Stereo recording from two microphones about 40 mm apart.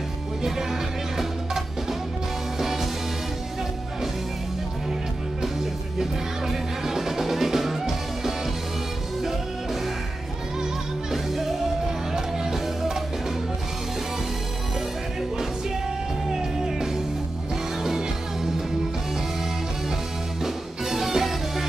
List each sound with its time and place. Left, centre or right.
1.1 s music: centre
5.9 s music: centre
10.6 s music: centre
16.3 s music: centre
20.4 s music: centre